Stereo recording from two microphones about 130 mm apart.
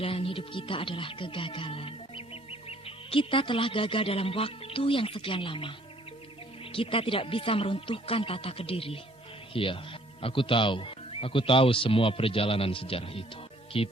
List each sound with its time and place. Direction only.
0.0 s speech: 45° left (ahead or behind)